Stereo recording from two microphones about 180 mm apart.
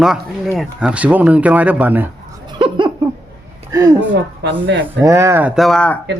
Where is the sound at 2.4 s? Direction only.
25° right (ahead or behind).